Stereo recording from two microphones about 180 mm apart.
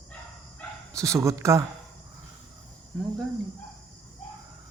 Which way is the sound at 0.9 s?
15° right (ahead or behind).